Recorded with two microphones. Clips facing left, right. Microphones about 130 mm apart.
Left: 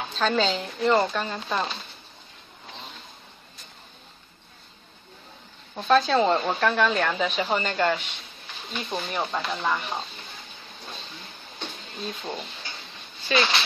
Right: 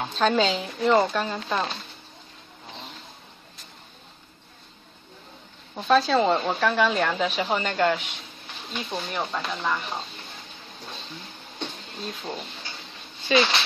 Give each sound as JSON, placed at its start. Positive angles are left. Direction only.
{"t": 0.2, "sound": "speech", "side_deg": -5}
{"t": 5.8, "sound": "speech", "side_deg": 0}
{"t": 12.0, "sound": "speech", "side_deg": 0}